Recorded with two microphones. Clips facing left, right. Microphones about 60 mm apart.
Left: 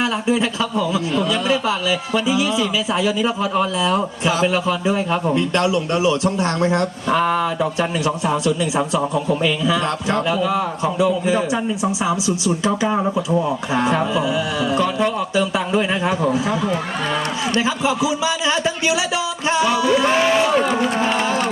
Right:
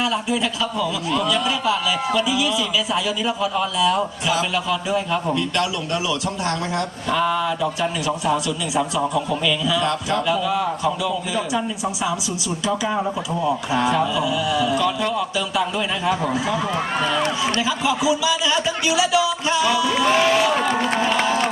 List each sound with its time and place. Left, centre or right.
0.0 s speech: left
17.6 s speech: left
21.1 s crowd: left